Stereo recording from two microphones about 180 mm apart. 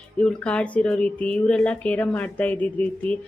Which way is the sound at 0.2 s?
5° left (ahead or behind).